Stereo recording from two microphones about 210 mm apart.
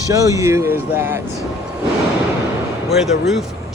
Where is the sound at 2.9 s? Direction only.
Centre (ahead or behind).